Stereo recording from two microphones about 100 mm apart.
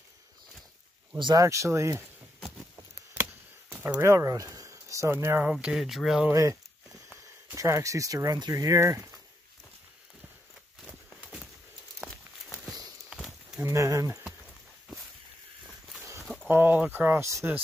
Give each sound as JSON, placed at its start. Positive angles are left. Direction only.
{"t": 1.1, "sound": "speech", "side_deg": -45}
{"t": 1.4, "sound": "speech", "side_deg": -30}
{"t": 3.2, "sound": "chop", "side_deg": -20}
{"t": 5.5, "sound": "speech", "side_deg": -10}
{"t": 6.3, "sound": "speech", "side_deg": -30}
{"t": 13.1, "sound": "a sound", "side_deg": -5}
{"t": 13.6, "sound": "speech", "side_deg": -30}
{"t": 16.0, "sound": "a sound", "side_deg": -30}
{"t": 16.4, "sound": "speech", "side_deg": -20}